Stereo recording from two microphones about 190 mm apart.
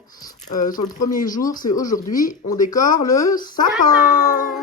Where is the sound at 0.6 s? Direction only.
45° left (ahead or behind).